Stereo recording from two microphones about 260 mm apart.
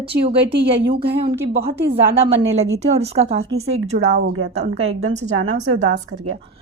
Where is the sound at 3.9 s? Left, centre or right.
Right.